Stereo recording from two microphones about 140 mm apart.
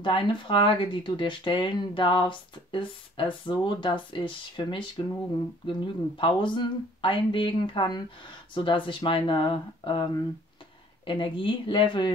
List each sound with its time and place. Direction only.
0.0 s speech: 35° left (ahead or behind)